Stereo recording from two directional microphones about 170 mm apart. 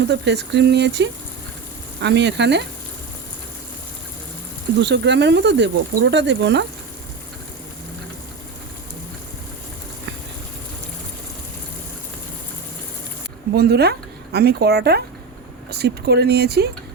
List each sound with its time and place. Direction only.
0.1 s speech: 90° right
4.8 s speech: 90° right
13.5 s speech: 70° right (ahead or behind)